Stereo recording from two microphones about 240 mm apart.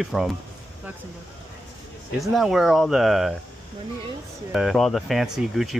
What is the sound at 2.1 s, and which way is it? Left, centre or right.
Speech, centre.